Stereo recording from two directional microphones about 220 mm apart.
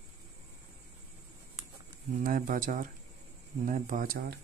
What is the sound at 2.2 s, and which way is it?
Speech, 40° right (ahead or behind).